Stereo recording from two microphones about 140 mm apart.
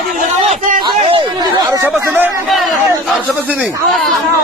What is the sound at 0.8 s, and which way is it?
Speech, 35° right (ahead or behind).